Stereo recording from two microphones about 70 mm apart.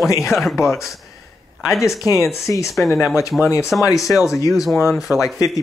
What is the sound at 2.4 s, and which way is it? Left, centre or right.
Speech, left.